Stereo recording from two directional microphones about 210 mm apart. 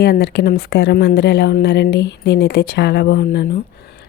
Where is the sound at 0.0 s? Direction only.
50° left (ahead or behind).